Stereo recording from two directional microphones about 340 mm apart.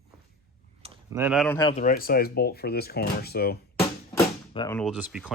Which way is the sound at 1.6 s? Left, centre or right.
Centre.